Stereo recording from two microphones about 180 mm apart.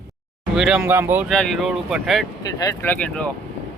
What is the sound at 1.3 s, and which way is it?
Speech, centre (ahead or behind).